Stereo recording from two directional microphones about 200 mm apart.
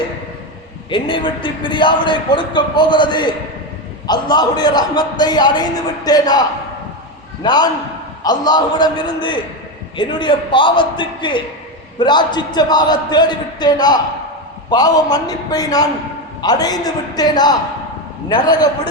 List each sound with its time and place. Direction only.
0.9 s a man's voice: 25° left (ahead or behind)
7.4 s a man's voice: 20° left (ahead or behind)